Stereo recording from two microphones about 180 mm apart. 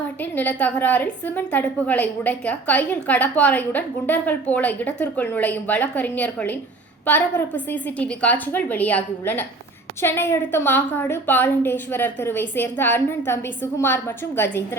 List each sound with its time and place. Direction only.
0.2 s a woman's voice: 10° left (ahead or behind)